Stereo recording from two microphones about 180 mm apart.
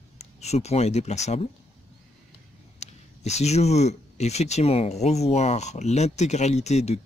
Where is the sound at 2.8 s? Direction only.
40° left (ahead or behind).